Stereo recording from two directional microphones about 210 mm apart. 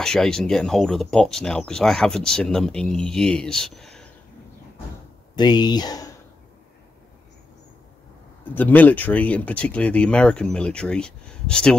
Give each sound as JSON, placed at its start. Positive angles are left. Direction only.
{"t": 0.0, "sound": "speech", "side_deg": 5}
{"t": 5.3, "sound": "speech", "side_deg": 20}
{"t": 8.5, "sound": "speech", "side_deg": 10}